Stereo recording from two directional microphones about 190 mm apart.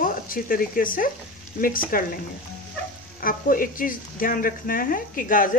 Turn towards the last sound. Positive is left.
turn(degrees=45)  # may be behind; listen again after turning